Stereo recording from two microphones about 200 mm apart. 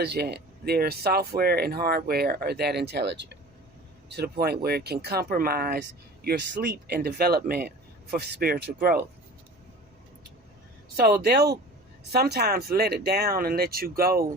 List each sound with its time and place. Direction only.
0.0 s speech: 55° right (ahead or behind)
11.0 s speech: 55° right (ahead or behind)